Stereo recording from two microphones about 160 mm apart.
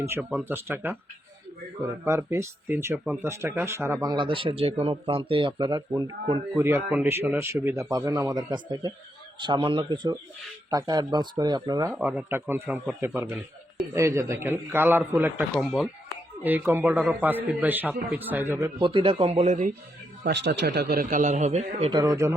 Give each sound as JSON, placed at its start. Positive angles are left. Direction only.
{"t": 0.0, "sound": "speech", "side_deg": -15}
{"t": 2.0, "sound": "speech", "side_deg": -20}
{"t": 3.2, "sound": "speech", "side_deg": -15}
{"t": 11.9, "sound": "speech", "side_deg": -5}
{"t": 18.8, "sound": "speech", "side_deg": -35}
{"t": 20.2, "sound": "a man's voice", "side_deg": -90}
{"t": 21.9, "sound": "speech", "side_deg": -20}